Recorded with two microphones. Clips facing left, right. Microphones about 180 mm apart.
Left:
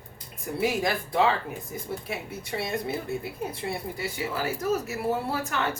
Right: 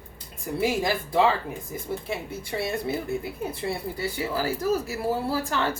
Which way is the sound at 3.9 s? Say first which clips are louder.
Right 3 dB; 30° right (ahead or behind).